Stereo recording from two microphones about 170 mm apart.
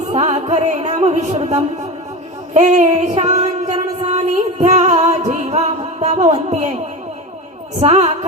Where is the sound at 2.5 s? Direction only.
45° right (ahead or behind).